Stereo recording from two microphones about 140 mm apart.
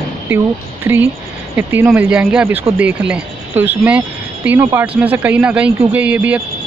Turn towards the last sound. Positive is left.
turn(degrees=-10)  # may be behind; listen again after turning